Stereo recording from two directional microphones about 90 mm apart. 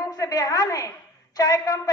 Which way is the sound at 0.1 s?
40° left (ahead or behind).